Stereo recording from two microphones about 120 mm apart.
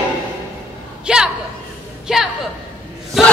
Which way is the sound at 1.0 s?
5° right (ahead or behind).